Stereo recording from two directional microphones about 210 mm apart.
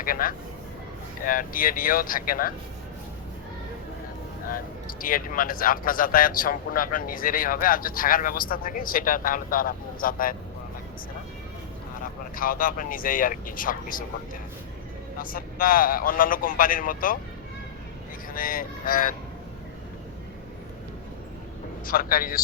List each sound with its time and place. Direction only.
0.0 s speech: 45° left (ahead or behind)
4.5 s speech: 40° left (ahead or behind)
12.4 s a man's voice: 40° left (ahead or behind)
15.2 s a man's voice: 40° left (ahead or behind)
18.3 s a man's voice: 40° left (ahead or behind)
21.8 s speech: 45° left (ahead or behind)